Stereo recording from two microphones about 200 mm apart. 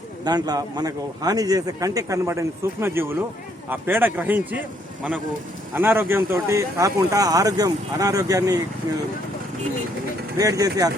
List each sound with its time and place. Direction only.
0.3 s speech: 20° right (ahead or behind)
5.7 s speech: 10° right (ahead or behind)
10.3 s speech: 20° right (ahead or behind)